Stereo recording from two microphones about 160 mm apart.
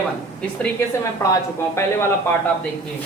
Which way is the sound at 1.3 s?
15° left (ahead or behind).